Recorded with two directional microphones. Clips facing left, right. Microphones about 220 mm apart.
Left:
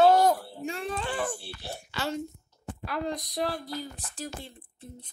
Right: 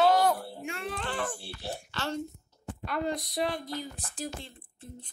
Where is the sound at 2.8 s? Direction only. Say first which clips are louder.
Right 1 dB; centre (ahead or behind).